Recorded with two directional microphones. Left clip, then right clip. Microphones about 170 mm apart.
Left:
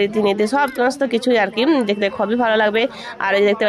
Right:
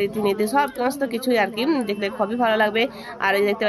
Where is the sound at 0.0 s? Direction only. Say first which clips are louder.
Left 5 dB; 30° left (ahead or behind).